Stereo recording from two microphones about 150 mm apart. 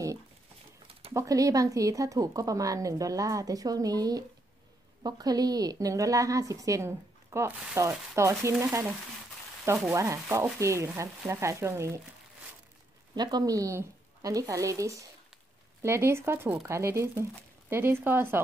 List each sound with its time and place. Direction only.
1.1 s speech: 20° right (ahead or behind)
9.8 s speech: 20° right (ahead or behind)
13.1 s speech: 30° right (ahead or behind)